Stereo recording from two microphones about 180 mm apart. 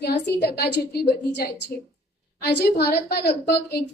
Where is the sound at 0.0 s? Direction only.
65° left (ahead or behind).